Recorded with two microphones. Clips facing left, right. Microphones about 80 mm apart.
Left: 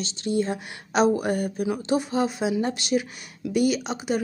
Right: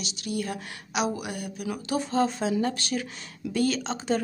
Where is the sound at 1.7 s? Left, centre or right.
Left.